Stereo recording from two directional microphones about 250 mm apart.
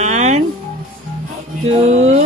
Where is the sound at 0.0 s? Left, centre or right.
Right.